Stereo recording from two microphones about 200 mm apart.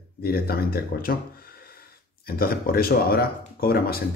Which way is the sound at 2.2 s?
50° left (ahead or behind).